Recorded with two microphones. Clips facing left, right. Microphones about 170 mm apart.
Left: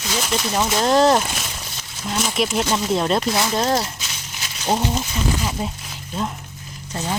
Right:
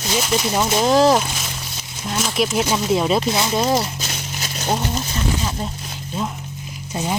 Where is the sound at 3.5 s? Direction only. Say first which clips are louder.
Right 3 dB; 10° right (ahead or behind).